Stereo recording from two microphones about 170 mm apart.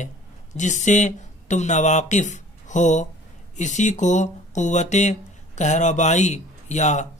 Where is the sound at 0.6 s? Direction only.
45° left (ahead or behind).